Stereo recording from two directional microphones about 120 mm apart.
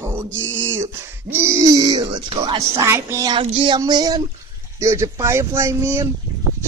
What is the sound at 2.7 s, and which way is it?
Music, 20° right (ahead or behind).